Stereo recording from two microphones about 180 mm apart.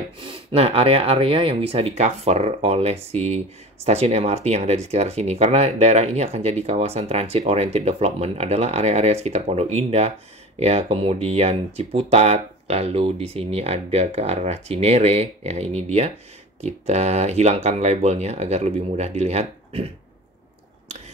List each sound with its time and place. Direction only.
0.2 s speech: 30° right (ahead or behind)